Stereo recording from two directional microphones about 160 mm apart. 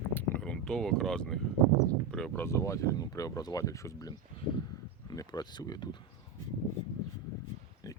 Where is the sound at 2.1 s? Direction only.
5° left (ahead or behind).